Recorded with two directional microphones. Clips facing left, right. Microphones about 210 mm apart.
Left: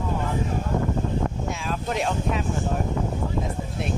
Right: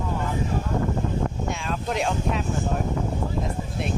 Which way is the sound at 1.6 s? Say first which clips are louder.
Even; centre (ahead or behind).